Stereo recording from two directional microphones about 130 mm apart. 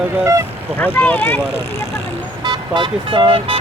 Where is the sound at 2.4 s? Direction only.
35° right (ahead or behind).